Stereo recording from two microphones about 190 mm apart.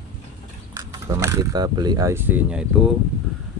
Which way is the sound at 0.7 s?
15° right (ahead or behind).